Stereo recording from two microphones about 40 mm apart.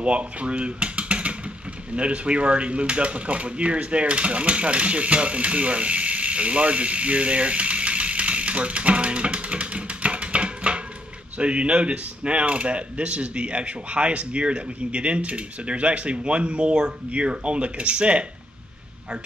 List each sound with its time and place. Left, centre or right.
0.0 s speech: right